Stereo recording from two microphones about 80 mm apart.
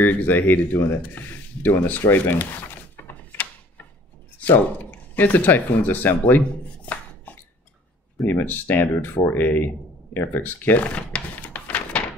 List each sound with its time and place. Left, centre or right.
0.0 s speech: left
8.3 s speech: left
11.0 s music: centre